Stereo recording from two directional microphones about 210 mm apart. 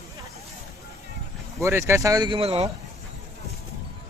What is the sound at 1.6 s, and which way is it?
Speech, 10° right (ahead or behind).